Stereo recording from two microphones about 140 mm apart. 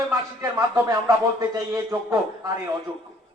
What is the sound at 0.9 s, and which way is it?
A man's voice, 25° right (ahead or behind).